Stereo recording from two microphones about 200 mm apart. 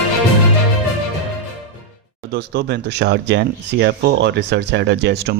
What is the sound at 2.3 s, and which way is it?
Speech, 55° right (ahead or behind).